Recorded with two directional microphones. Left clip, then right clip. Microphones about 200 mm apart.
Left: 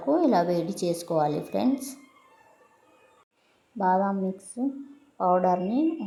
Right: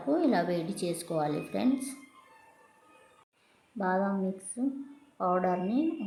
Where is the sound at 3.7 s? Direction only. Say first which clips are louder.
Left 6 dB; 15° left (ahead or behind).